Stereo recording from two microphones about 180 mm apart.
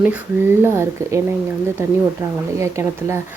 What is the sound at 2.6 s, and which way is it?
Speech, 15° right (ahead or behind).